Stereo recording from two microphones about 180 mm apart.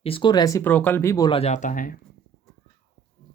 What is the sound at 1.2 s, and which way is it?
Speech, 35° left (ahead or behind).